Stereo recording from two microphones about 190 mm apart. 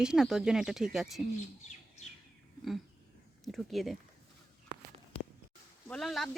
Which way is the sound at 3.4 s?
Centre (ahead or behind).